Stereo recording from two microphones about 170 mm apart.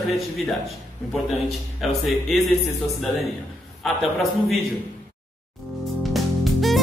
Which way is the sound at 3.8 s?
Centre (ahead or behind).